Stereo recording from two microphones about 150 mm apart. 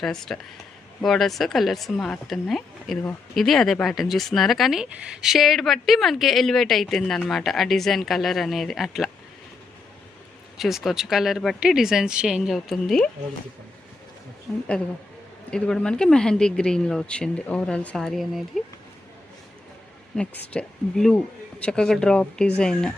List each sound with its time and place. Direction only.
0.0 s speech: centre (ahead or behind)
10.6 s speech: centre (ahead or behind)
15.4 s speech: 5° left (ahead or behind)
20.1 s speech: 10° left (ahead or behind)